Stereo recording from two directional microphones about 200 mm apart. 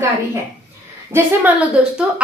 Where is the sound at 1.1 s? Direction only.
10° right (ahead or behind).